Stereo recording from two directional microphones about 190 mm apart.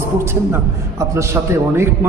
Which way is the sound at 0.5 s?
15° right (ahead or behind).